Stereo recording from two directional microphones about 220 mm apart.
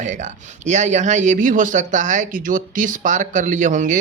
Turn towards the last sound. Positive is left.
turn(degrees=-35)  # may be behind; listen again after turning